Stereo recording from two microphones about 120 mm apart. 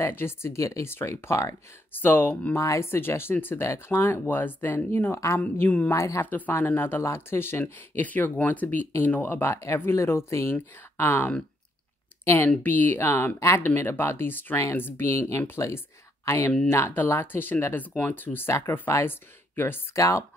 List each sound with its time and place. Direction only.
0.0 s speech: 20° left (ahead or behind)
5.9 s speech: 25° left (ahead or behind)
12.4 s speech: 15° left (ahead or behind)